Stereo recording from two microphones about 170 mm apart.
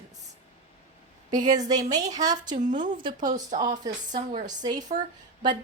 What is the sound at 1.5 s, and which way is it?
A woman's voice, 20° right (ahead or behind).